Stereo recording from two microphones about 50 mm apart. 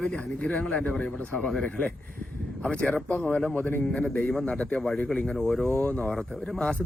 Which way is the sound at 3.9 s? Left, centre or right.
Left.